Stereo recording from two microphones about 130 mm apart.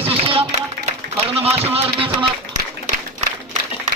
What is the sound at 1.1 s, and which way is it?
Speech, 50° right (ahead or behind).